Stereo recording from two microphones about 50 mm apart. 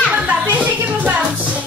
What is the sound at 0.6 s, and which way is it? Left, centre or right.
Music, right.